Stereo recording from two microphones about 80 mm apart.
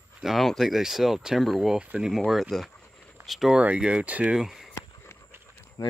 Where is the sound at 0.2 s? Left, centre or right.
Centre.